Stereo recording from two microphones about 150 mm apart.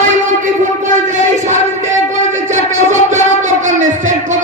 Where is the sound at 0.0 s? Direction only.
55° right (ahead or behind).